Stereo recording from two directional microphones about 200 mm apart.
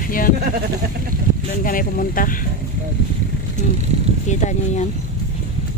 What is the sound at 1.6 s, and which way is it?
Speech, 45° left (ahead or behind).